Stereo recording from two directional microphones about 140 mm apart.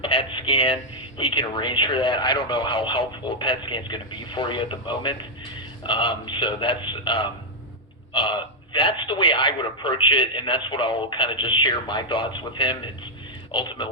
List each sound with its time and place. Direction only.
0.0 s speech: 40° left (ahead or behind)